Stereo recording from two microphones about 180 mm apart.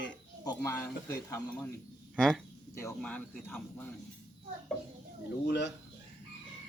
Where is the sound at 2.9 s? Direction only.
5° left (ahead or behind).